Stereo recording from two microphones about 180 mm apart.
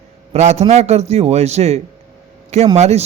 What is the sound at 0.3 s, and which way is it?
A man's voice, 35° right (ahead or behind).